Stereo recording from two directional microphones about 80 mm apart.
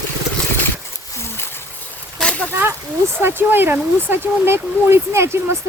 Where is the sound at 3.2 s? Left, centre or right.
Right.